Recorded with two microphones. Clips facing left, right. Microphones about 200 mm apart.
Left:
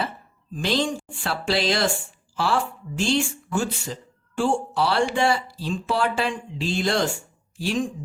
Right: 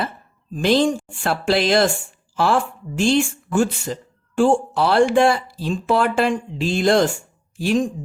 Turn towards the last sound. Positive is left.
turn(degrees=-50)  # may be behind; listen again after turning